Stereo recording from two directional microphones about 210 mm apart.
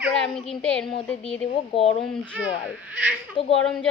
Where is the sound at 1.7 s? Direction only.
25° left (ahead or behind).